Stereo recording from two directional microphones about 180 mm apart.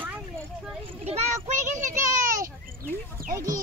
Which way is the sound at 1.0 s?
35° right (ahead or behind).